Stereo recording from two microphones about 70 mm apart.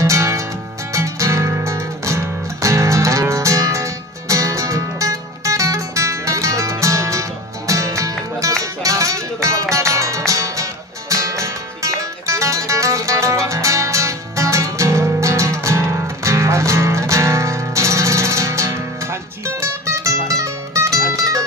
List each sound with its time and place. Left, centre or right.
0.0 s music: right